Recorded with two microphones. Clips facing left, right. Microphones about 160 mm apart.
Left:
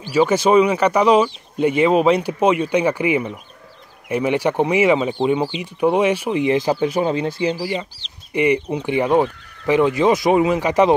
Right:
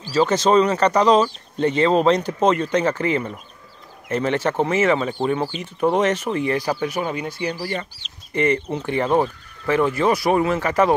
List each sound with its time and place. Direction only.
0.0 s speech: 10° left (ahead or behind)
7.5 s speech: 10° left (ahead or behind)